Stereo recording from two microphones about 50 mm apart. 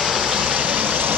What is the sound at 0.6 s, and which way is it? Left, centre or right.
Vehicle, right.